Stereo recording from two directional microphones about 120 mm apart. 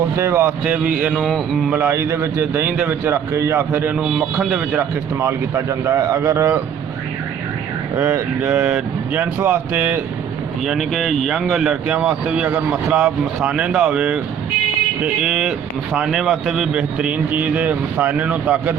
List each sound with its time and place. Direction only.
0.2 s speech: 20° right (ahead or behind); by 1.4 s centre (ahead or behind)
1.7 s a man's voice: 20° right (ahead or behind)
7.9 s speech: 20° right (ahead or behind)
10.7 s speech: centre (ahead or behind)